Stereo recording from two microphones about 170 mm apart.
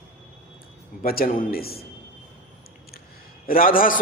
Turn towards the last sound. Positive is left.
turn(degrees=55)  # may be behind; listen again after turning